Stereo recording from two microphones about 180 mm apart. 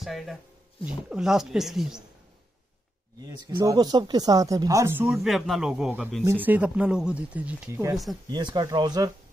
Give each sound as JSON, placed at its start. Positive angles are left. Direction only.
{"t": 0.0, "sound": "speech", "side_deg": 0}
{"t": 3.3, "sound": "speech", "side_deg": -20}
{"t": 5.0, "sound": "speech", "side_deg": 0}
{"t": 8.3, "sound": "speech", "side_deg": -25}